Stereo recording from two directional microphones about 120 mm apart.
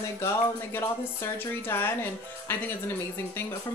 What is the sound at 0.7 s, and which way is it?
Speech, 20° left (ahead or behind).